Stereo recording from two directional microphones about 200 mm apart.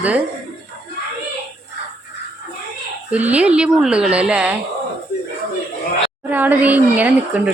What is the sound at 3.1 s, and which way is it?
Speech, 5° right (ahead or behind).